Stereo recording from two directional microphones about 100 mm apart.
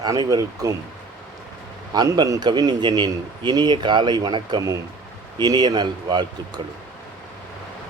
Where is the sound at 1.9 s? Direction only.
45° right (ahead or behind).